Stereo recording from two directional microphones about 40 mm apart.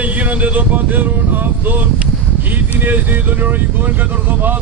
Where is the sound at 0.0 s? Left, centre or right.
Right.